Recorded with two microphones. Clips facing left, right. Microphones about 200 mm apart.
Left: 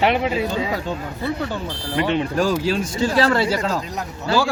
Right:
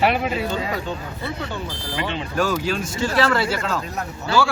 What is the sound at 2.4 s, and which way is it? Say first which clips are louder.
A man's voice: right 2 dB; 30° left (ahead or behind).